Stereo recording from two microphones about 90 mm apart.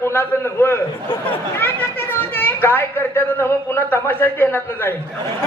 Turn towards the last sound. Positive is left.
turn(degrees=25)  # may be behind; listen again after turning